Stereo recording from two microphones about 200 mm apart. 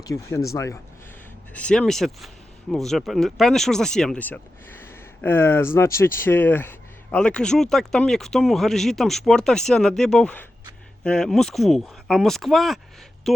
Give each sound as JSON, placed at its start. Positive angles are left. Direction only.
{"t": 0.0, "sound": "speech", "side_deg": 15}